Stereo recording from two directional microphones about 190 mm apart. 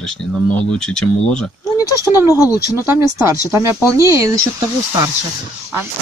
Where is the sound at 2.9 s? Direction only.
15° right (ahead or behind).